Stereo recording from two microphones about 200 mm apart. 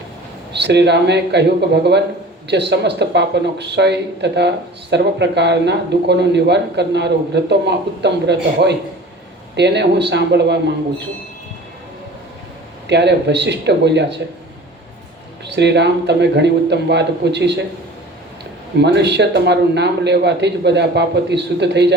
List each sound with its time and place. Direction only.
0.5 s speech: 60° right (ahead or behind)
12.9 s speech: 55° right (ahead or behind)
15.4 s speech: 60° right (ahead or behind)
18.8 s speech: 60° right (ahead or behind)